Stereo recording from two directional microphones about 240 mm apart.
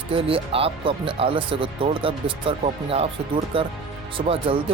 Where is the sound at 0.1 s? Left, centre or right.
Right.